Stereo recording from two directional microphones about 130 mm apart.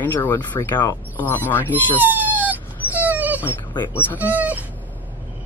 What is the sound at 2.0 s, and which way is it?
Dog, 15° right (ahead or behind).